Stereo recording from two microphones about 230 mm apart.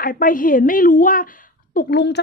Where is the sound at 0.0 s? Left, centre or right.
Left.